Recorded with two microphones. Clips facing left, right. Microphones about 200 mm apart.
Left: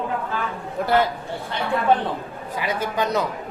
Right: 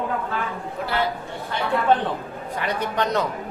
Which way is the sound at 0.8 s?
45° left (ahead or behind).